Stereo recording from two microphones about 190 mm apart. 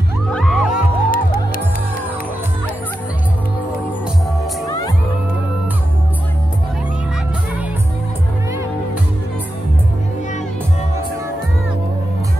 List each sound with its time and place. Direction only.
0.3 s music: centre (ahead or behind)
0.7 s music: 45° left (ahead or behind)